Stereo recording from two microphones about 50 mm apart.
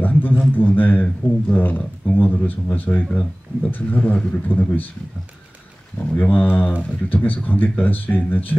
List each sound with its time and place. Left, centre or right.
0.0 s a sound: left
0.6 s a man's voice: left
3.1 s speech: left
3.7 s a man's voice: left
5.9 s a man's voice: left